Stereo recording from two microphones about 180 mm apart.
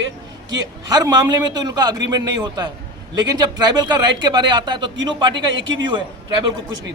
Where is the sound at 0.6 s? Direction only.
20° right (ahead or behind).